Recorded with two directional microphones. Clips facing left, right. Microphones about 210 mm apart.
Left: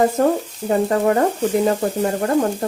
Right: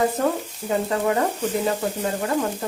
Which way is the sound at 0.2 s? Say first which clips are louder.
Left 6 dB; 50° left (ahead or behind).